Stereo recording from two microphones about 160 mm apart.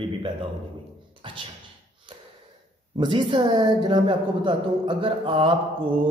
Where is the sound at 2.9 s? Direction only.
30° right (ahead or behind).